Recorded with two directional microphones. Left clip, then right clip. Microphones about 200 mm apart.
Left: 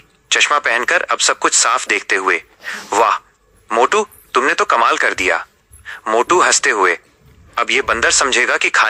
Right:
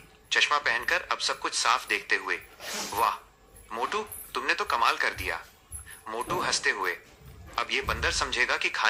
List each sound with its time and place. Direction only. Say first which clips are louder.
0.3 s speech: left 11 dB; 50° left (ahead or behind)